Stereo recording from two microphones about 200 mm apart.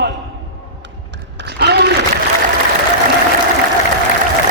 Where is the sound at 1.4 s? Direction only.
55° right (ahead or behind).